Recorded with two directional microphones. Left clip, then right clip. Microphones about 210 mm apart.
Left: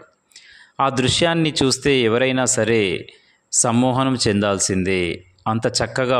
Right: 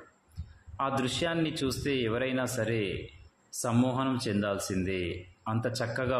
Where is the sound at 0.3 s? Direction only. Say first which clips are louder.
Left 15 dB; 50° left (ahead or behind).